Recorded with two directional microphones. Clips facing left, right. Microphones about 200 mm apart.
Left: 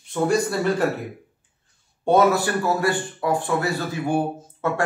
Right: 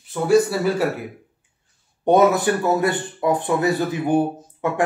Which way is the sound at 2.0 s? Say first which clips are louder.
Right 2 dB; 20° right (ahead or behind).